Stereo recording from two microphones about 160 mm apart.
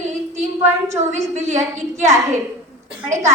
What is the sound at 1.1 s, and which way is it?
Speech, 45° right (ahead or behind).